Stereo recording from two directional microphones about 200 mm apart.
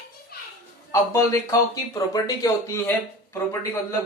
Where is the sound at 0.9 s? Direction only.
15° left (ahead or behind).